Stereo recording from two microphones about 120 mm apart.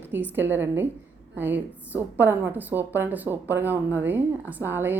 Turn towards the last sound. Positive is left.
turn(degrees=-15)  # may be behind; listen again after turning